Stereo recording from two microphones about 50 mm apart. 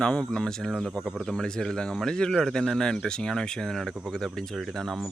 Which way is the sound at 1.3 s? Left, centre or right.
Centre.